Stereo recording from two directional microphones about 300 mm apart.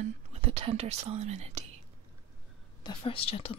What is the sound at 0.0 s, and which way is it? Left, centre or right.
Speech, right.